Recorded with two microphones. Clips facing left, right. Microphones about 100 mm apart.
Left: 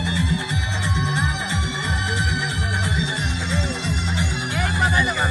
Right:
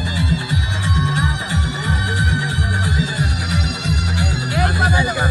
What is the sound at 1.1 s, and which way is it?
Music, 15° right (ahead or behind).